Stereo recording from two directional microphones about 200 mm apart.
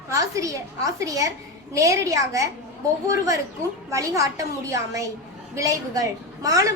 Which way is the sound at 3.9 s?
15° right (ahead or behind).